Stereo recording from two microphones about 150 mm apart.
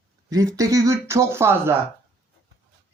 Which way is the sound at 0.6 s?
25° right (ahead or behind).